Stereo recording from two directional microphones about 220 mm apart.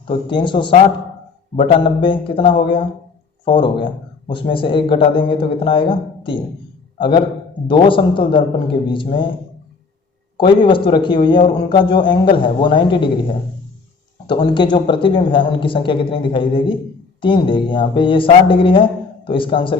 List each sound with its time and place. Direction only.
0.1 s a man's voice: 20° left (ahead or behind)
7.7 s a man's voice: 25° left (ahead or behind)
10.3 s a man's voice: 20° left (ahead or behind)